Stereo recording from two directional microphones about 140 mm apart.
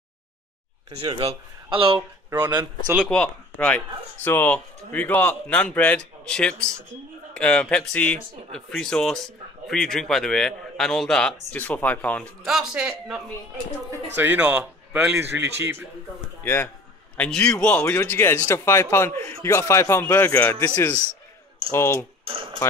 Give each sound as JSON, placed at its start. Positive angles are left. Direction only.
{"t": 0.9, "sound": "speech", "side_deg": -40}
{"t": 2.3, "sound": "speech", "side_deg": -25}
{"t": 3.1, "sound": "speech", "side_deg": 10}
{"t": 12.4, "sound": "speech", "side_deg": -5}
{"t": 15.1, "sound": "speech", "side_deg": -15}
{"t": 16.4, "sound": "speech", "side_deg": 15}
{"t": 20.6, "sound": "speech", "side_deg": 25}
{"t": 22.2, "sound": "speech", "side_deg": -40}